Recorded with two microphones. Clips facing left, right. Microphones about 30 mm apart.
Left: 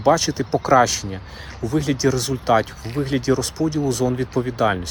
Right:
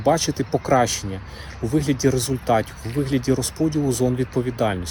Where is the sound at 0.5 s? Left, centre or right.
Left.